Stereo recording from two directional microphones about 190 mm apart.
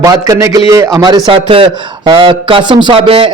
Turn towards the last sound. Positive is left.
turn(degrees=-25)  # may be behind; listen again after turning